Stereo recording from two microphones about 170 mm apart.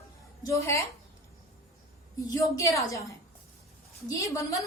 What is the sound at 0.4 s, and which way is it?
Speech, 15° left (ahead or behind).